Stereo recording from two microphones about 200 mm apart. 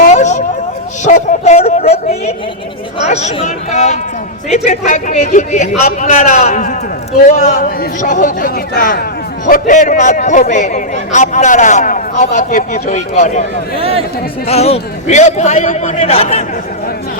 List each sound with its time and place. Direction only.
0.0 s a sound: 35° left (ahead or behind)
1.0 s a man's voice: 35° left (ahead or behind)
13.7 s speech: 30° right (ahead or behind)
14.4 s a man's voice: 30° left (ahead or behind)